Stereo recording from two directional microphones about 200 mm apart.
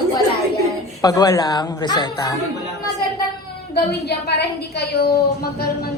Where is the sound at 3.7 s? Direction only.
55° left (ahead or behind).